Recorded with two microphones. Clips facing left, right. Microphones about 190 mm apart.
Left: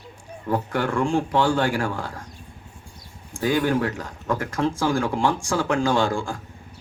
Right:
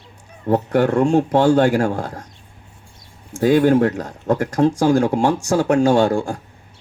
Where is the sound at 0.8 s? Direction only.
40° right (ahead or behind).